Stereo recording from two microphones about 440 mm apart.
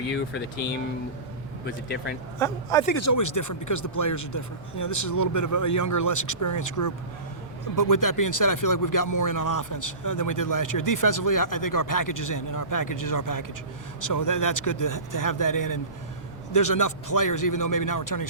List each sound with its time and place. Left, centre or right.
1.6 s speech: left
2.4 s a man's voice: centre
2.9 s speech: left